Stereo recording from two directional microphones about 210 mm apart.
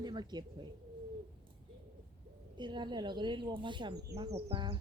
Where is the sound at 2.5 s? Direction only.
20° right (ahead or behind).